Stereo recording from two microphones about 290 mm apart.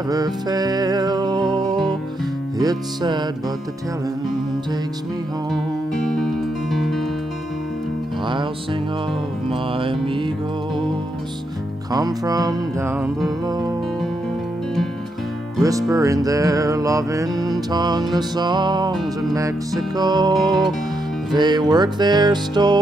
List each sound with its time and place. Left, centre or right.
0.1 s music: centre
6.0 s music: centre
9.5 s music: centre
11.9 s music: centre
15.6 s music: centre